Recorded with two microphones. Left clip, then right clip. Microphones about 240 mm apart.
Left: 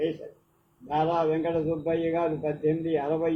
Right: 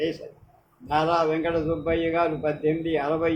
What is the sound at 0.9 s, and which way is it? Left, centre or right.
A man's voice, right.